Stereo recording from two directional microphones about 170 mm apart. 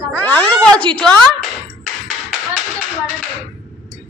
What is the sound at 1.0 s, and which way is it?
Speech, 5° left (ahead or behind).